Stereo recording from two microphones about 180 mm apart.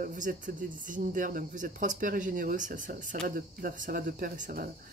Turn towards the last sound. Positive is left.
turn(degrees=-50)  # may be behind; listen again after turning